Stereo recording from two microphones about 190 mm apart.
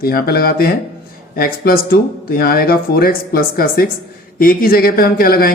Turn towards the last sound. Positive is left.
turn(degrees=50)  # may be behind; listen again after turning